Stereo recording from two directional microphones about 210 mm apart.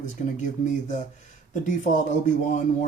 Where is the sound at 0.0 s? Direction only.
35° left (ahead or behind).